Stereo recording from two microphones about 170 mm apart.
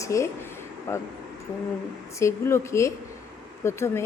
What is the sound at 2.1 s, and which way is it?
Speech, 15° left (ahead or behind).